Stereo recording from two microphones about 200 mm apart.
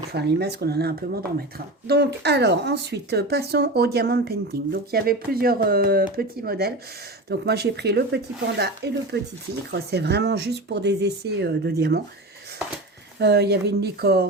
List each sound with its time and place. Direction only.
0.1 s speech: 55° right (ahead or behind)
13.1 s speech: 55° right (ahead or behind)